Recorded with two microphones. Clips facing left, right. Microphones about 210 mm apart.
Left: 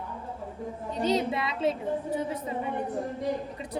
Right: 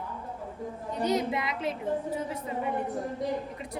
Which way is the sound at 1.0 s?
25° left (ahead or behind).